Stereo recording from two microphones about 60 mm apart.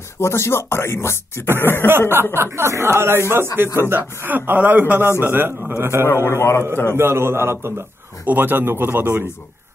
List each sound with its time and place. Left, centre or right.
0.2 s speech: left
1.9 s speech: right
4.5 s a man's voice: right
6.2 s speech: left
6.9 s speech: right